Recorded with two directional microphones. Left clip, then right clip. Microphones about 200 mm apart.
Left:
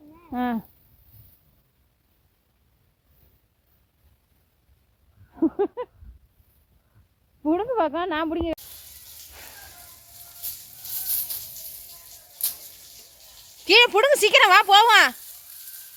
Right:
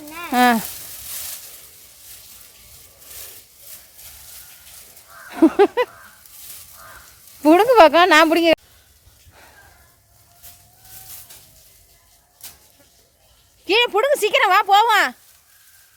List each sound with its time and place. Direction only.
0.3 s sizzle: 10° right (ahead or behind)
5.3 s a sound: 10° right (ahead or behind)
7.4 s speech: 10° right (ahead or behind)
13.7 s speech: 10° right (ahead or behind)